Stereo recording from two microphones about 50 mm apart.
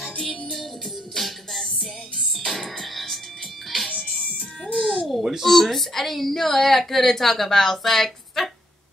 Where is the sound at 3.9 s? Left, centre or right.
Left.